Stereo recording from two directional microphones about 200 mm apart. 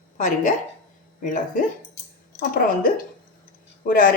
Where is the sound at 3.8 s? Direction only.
45° left (ahead or behind).